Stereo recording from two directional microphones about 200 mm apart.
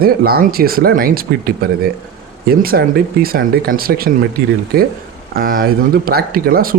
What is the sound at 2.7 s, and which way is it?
Speech, 55° right (ahead or behind).